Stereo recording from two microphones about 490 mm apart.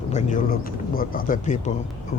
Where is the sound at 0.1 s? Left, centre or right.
Centre.